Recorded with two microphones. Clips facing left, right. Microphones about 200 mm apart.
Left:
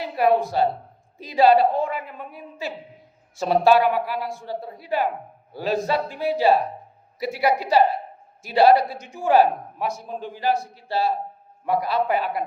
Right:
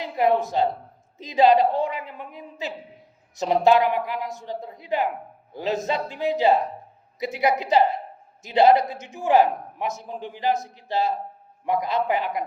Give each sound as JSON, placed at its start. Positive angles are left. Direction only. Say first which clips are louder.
{"t": 0.0, "sound": "speech", "louder": "left 1 dB", "side_deg": -20}